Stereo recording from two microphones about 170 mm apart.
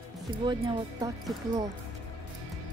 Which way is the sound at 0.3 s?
25° right (ahead or behind).